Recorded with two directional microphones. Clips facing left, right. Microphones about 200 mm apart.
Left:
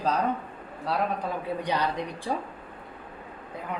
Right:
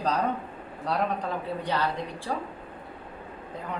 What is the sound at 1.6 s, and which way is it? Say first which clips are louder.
Speech: left 1 dB; 15° left (ahead or behind).